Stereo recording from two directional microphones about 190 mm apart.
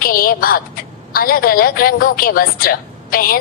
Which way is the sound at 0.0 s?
50° left (ahead or behind).